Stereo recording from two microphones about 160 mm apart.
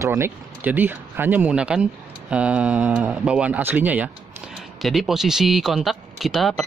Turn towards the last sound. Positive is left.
turn(degrees=0)  # may be behind; listen again after turning